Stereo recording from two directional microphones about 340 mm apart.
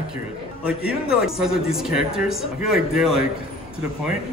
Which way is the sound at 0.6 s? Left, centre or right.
Centre.